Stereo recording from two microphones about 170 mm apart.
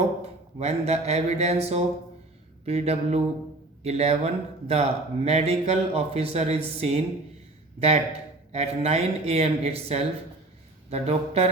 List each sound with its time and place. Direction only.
0.6 s speech: 40° right (ahead or behind)